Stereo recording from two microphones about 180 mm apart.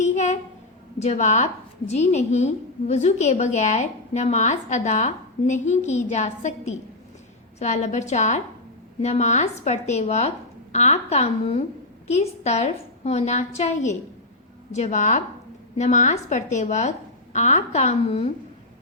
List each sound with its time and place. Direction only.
0.0 s a woman's voice: 40° left (ahead or behind)